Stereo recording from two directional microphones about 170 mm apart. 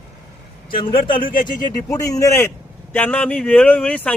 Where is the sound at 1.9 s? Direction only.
20° left (ahead or behind).